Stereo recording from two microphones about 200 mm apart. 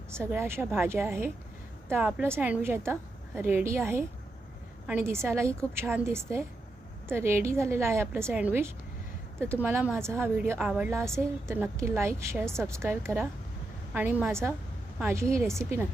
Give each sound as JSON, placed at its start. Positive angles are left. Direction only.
{"t": 0.1, "sound": "a woman's voice", "side_deg": -10}